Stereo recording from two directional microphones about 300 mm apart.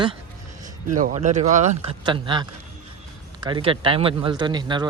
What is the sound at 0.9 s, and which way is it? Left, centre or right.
Speech, right.